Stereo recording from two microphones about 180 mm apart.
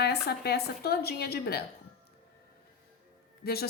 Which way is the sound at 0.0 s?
65° left (ahead or behind).